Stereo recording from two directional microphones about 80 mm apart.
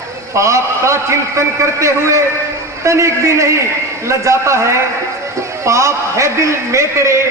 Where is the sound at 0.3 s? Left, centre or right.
Right.